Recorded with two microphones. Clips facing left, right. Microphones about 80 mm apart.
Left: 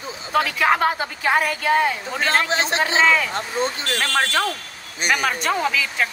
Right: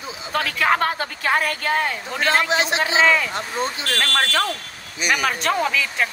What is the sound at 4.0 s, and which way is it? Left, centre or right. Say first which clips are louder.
Speech: even; centre.